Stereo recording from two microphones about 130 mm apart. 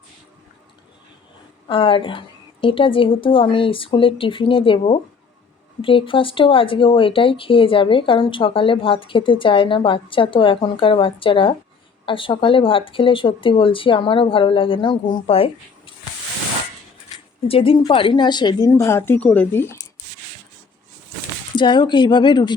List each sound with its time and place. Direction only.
1.6 s a woman's voice: 40° left (ahead or behind)
17.5 s speech: 40° left (ahead or behind)
18.7 s speech: 20° left (ahead or behind)
21.5 s speech: 35° left (ahead or behind)